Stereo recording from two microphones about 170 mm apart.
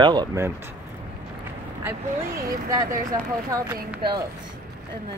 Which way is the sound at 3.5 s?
20° right (ahead or behind).